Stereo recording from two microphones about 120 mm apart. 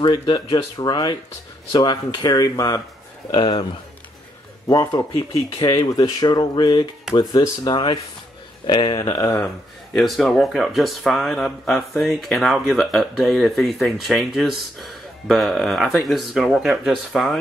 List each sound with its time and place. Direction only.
0.0 s speech: 40° left (ahead or behind)
4.6 s speech: 30° left (ahead or behind)
9.9 s speech: centre (ahead or behind)